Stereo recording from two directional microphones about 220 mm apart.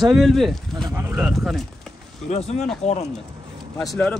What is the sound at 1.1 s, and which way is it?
Speech, centre (ahead or behind).